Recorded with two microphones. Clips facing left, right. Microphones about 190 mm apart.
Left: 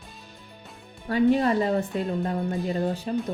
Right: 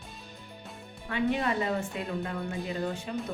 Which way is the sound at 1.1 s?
35° left (ahead or behind).